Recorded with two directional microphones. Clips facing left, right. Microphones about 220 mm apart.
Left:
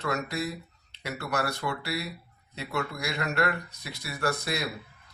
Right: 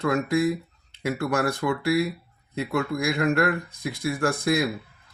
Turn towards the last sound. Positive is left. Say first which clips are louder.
# right 7 dB
turn(degrees=-50)  # may be behind; listen again after turning